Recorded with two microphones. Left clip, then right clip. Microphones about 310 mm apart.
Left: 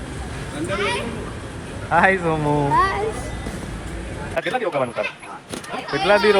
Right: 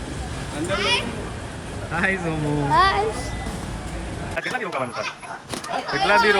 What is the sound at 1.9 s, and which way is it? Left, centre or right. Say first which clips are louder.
Speech: left 7 dB; centre.